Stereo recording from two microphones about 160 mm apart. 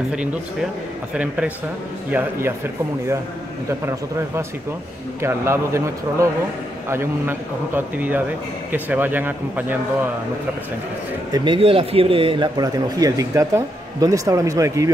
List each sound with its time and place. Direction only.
0.1 s a man's voice: 5° right (ahead or behind)
5.2 s a man's voice: 15° right (ahead or behind)
11.3 s a man's voice: 30° right (ahead or behind)